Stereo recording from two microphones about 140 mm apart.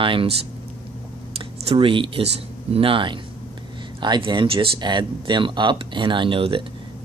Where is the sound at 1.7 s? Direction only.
40° right (ahead or behind).